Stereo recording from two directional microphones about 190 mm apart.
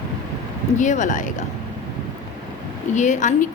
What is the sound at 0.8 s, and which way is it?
Speech, 40° left (ahead or behind).